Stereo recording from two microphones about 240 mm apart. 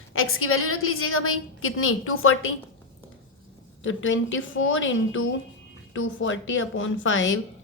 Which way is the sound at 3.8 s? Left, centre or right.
Left.